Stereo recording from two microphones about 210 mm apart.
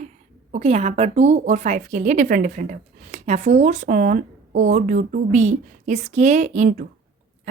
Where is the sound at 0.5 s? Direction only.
30° right (ahead or behind).